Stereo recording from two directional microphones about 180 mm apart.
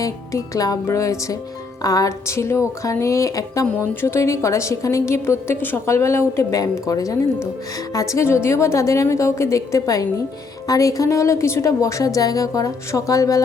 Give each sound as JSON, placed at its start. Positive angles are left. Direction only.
{"t": 0.0, "sound": "a woman's voice", "side_deg": 20}